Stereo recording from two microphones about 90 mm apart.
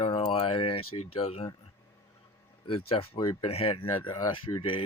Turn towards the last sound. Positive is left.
turn(degrees=75)  # may be behind; listen again after turning